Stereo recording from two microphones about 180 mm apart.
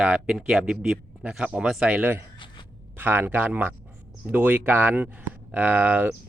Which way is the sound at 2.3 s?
25° left (ahead or behind).